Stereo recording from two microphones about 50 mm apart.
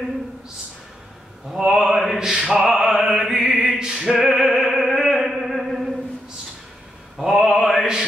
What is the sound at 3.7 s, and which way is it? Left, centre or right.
Opera, centre.